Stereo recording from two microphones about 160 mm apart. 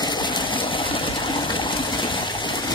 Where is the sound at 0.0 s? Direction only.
30° left (ahead or behind).